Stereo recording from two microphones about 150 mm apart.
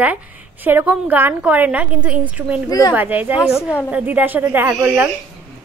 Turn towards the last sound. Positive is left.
turn(degrees=-10)  # may be behind; listen again after turning